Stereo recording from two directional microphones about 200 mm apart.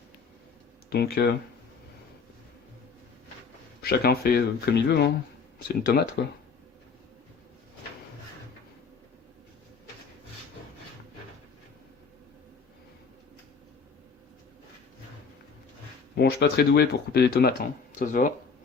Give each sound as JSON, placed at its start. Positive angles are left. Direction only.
{"t": 0.9, "sound": "speech", "side_deg": 50}
{"t": 3.8, "sound": "speech", "side_deg": 50}
{"t": 16.1, "sound": "speech", "side_deg": 55}